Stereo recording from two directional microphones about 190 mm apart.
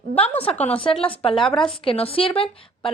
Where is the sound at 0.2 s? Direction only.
30° left (ahead or behind).